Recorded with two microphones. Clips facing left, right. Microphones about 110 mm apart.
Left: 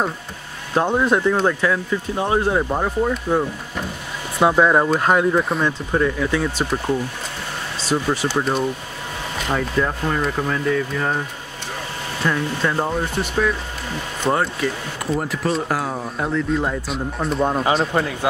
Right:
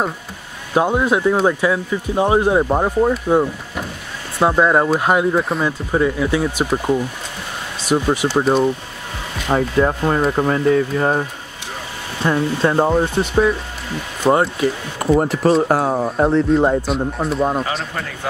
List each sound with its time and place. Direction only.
0.7 s speech: 10° right (ahead or behind)
4.4 s speech: centre (ahead or behind)
7.8 s speech: 15° right (ahead or behind)
9.5 s speech: 30° right (ahead or behind)
15.1 s speech: 30° right (ahead or behind)
16.8 s speech: centre (ahead or behind)
17.9 s speech: 20° left (ahead or behind)